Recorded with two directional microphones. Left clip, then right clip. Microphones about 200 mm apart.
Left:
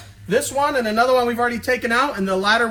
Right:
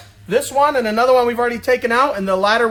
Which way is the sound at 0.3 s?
25° right (ahead or behind).